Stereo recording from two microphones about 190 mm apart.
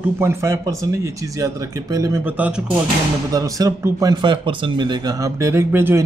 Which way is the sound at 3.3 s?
20° right (ahead or behind).